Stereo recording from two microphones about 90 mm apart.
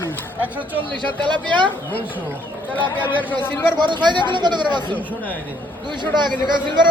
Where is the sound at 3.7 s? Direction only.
55° right (ahead or behind).